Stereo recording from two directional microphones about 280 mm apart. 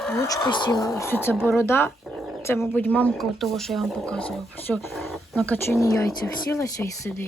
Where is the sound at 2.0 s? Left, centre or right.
Centre.